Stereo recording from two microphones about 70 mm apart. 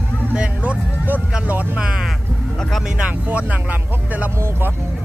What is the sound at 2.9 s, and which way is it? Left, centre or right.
Speech, centre.